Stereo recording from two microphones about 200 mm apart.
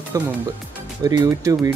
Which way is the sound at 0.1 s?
15° right (ahead or behind).